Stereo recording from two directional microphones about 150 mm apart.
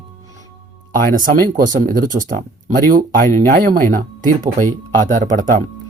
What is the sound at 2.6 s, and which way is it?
Speech, 65° right (ahead or behind).